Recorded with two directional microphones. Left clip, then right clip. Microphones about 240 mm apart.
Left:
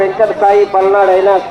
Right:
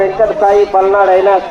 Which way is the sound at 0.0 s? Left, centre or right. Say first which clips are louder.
Even; centre.